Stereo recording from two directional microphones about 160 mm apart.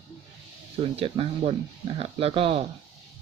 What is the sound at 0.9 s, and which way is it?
Speech, 35° right (ahead or behind).